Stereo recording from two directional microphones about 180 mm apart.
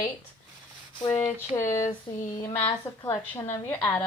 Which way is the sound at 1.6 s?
40° left (ahead or behind).